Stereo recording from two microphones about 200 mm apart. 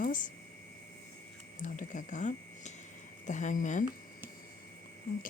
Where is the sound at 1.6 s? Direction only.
40° left (ahead or behind).